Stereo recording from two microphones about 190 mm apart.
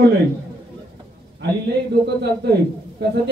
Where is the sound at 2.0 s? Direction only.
60° right (ahead or behind).